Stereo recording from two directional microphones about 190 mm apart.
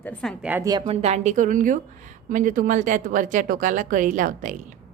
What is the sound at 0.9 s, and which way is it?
A woman's voice, 35° right (ahead or behind).